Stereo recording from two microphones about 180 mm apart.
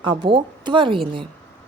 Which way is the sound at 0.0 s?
30° right (ahead or behind).